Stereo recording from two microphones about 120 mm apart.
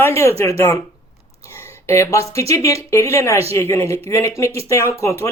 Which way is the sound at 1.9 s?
25° left (ahead or behind).